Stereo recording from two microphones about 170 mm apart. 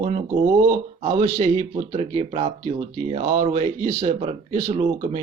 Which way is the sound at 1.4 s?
35° right (ahead or behind).